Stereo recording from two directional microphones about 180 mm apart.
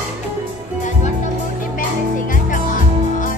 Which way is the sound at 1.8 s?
50° left (ahead or behind).